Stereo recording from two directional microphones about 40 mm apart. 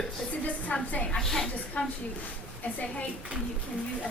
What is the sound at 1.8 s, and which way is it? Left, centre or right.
A woman's voice, left.